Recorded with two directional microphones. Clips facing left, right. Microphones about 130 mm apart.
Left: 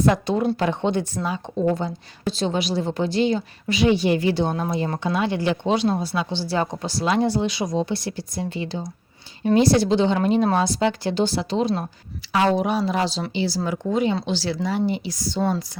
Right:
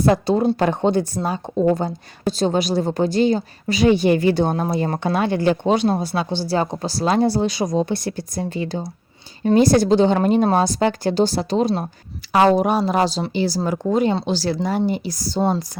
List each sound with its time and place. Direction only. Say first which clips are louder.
0.0 s a woman's voice: right 3 dB; 35° right (ahead or behind)
4.8 s a woman's voice: right 3 dB; 50° right (ahead or behind)
6.5 s a woman's voice: right 3 dB; 35° right (ahead or behind)